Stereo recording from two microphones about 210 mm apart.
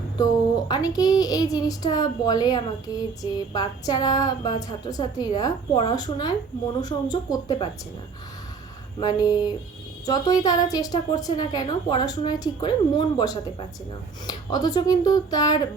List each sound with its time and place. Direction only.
0.7 s a woman's voice: 20° left (ahead or behind)
9.0 s a woman's voice: 20° left (ahead or behind)